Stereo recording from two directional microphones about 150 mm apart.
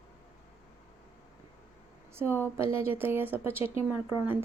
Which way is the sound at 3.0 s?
15° right (ahead or behind).